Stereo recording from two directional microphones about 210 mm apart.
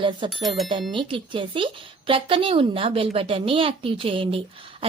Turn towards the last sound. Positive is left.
turn(degrees=-25)  # may be behind; listen again after turning